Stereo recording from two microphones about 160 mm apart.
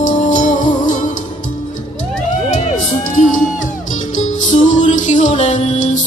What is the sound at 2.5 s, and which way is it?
Music, 50° left (ahead or behind).